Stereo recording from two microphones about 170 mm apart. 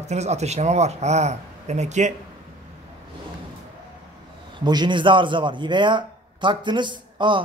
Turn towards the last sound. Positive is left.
turn(degrees=-25)  # may be behind; listen again after turning